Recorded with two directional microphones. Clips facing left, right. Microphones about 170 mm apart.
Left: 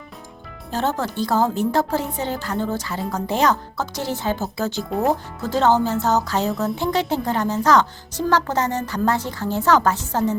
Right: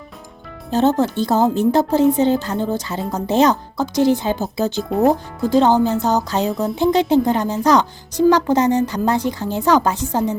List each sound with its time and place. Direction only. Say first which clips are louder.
0.7 s a woman's voice: right 7 dB; 20° right (ahead or behind)